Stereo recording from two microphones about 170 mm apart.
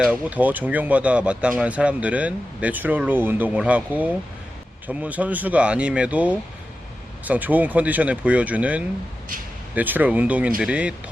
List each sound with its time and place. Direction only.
0.0 s speech: 10° right (ahead or behind)